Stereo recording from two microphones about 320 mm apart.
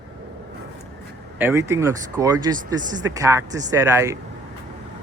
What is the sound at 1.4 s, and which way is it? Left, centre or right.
Speech, centre.